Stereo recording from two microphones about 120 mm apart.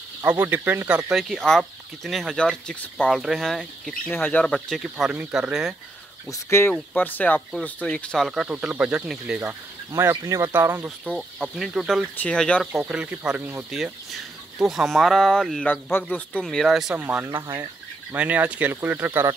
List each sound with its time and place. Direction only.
0.2 s speech: 15° right (ahead or behind)
1.1 s speech: 5° left (ahead or behind)
3.2 s speech: centre (ahead or behind)
4.1 s speech: 15° left (ahead or behind)
4.6 s speech: centre (ahead or behind)
6.3 s speech: 20° left (ahead or behind); by 9.4 s 10° right (ahead or behind)
9.4 s speech: 20° right (ahead or behind)
11.1 s speech: centre (ahead or behind)
12.2 s speech: 10° left (ahead or behind)
12.8 s speech: 10° right (ahead or behind)
13.7 s speech: 5° right (ahead or behind)
15.7 s speech: 15° left (ahead or behind)
16.4 s speech: centre (ahead or behind)
16.9 s speech: 15° right (ahead or behind)